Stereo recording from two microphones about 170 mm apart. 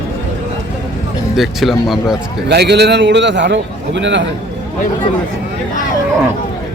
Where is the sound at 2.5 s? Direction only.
80° right.